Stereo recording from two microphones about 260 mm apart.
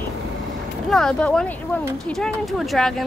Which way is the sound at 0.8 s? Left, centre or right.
Centre.